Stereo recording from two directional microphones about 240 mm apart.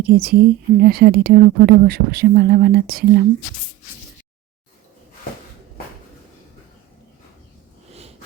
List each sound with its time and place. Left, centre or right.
0.0 s a woman's voice: right